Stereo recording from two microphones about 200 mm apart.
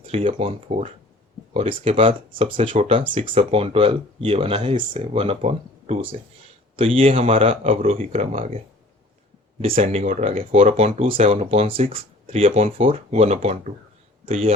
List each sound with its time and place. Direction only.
0.0 s speech: 30° right (ahead or behind)
9.6 s speech: 30° right (ahead or behind)